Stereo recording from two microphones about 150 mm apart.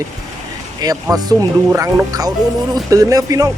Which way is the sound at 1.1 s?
25° right (ahead or behind).